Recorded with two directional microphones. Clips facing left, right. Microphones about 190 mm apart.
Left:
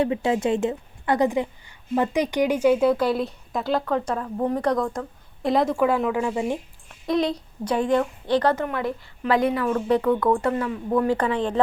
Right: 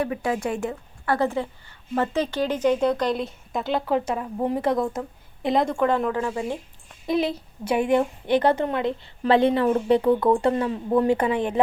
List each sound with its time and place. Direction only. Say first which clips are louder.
0.0 s a woman's voice: left 3 dB; 25° left (ahead or behind); by 3.9 s centre (ahead or behind)
3.9 s speech: right 1 dB; 10° right (ahead or behind); by 6.6 s 15° left (ahead or behind)
6.8 s a sound: left 1 dB; 5° right (ahead or behind)
7.8 s a woman's voice: right 1 dB; 20° right (ahead or behind)